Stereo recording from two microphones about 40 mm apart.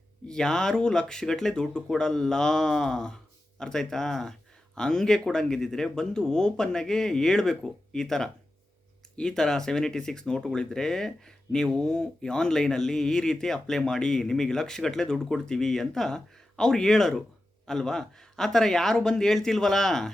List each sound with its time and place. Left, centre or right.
0.3 s speech: centre